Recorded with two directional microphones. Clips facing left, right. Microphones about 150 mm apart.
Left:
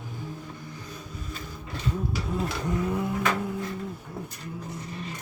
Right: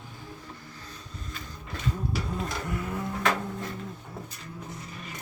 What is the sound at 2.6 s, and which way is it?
Vehicle, 20° left (ahead or behind).